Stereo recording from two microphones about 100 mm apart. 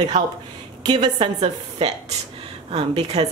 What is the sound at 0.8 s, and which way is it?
Speech, 45° right (ahead or behind).